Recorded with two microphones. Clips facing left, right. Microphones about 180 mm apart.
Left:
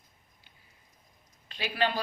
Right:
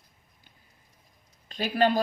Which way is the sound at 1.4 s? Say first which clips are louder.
Right 6 dB; 45° right (ahead or behind).